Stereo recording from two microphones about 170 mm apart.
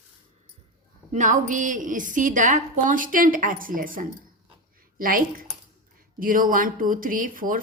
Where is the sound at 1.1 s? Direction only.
45° right (ahead or behind).